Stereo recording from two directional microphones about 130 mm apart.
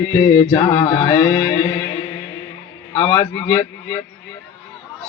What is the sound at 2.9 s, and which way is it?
Speech, 40° left (ahead or behind).